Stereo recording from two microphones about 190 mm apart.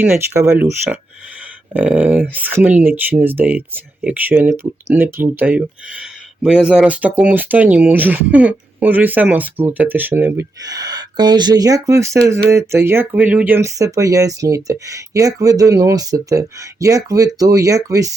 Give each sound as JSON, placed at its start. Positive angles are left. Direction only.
{"t": 0.0, "sound": "speech", "side_deg": -10}